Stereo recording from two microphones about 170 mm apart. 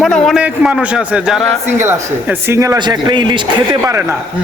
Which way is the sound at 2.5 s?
20° right (ahead or behind).